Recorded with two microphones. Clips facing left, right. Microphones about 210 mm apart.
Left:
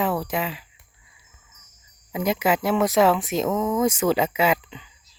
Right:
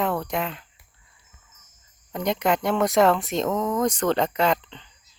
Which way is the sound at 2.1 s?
5° left (ahead or behind).